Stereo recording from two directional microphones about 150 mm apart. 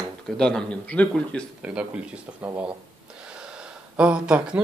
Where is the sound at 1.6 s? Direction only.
5° right (ahead or behind).